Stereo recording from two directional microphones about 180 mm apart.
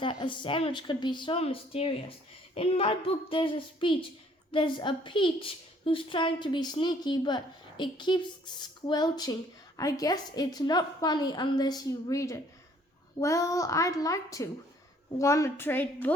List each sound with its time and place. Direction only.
0.0 s a woman's voice: 25° left (ahead or behind); by 16.1 s 10° left (ahead or behind)